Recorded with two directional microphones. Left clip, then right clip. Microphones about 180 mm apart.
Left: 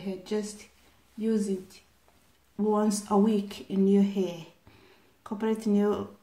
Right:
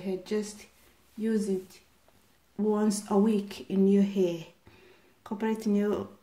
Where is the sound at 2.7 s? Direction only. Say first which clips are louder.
Left 2 dB; 15° right (ahead or behind).